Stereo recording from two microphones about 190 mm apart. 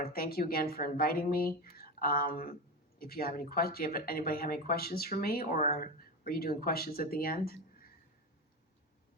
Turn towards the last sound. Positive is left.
turn(degrees=50)  # may be behind; listen again after turning